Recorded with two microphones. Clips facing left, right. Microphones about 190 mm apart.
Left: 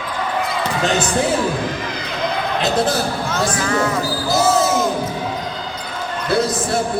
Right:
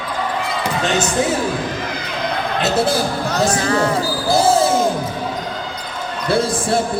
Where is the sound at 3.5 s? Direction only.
35° right (ahead or behind).